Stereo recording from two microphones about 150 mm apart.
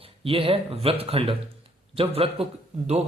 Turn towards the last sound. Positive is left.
turn(degrees=-45)  # may be behind; listen again after turning